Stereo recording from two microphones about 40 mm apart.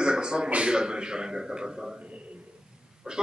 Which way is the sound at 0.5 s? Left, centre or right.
Right.